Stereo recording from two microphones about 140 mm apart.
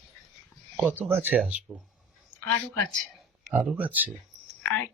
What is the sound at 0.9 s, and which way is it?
Speech, 15° right (ahead or behind).